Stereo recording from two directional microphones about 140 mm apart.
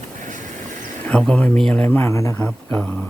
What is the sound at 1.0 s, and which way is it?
A man's voice, 10° left (ahead or behind).